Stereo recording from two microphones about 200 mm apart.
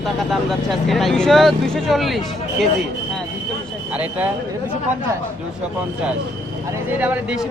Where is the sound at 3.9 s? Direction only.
5° right (ahead or behind).